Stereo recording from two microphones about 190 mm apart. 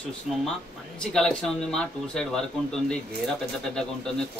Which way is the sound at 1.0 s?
5° left (ahead or behind).